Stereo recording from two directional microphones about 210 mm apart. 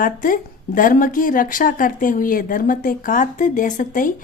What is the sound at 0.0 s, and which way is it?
Speech, 40° left (ahead or behind).